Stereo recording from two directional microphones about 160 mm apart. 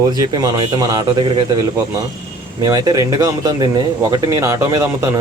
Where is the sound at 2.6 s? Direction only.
25° right (ahead or behind).